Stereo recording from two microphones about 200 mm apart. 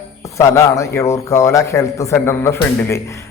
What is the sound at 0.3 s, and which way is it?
A man's voice, 15° left (ahead or behind).